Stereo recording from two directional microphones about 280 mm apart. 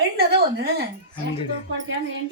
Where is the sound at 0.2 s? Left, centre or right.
Right.